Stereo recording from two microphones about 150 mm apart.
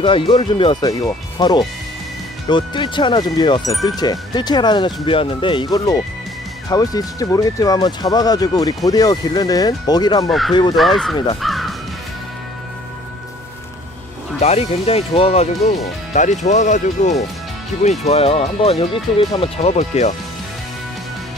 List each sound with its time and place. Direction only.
0.0 s speech: 35° left (ahead or behind)
10.8 s speech: centre (ahead or behind)
11.4 s crow: centre (ahead or behind)
14.4 s speech: 45° left (ahead or behind)
18.0 s speech: 40° left (ahead or behind)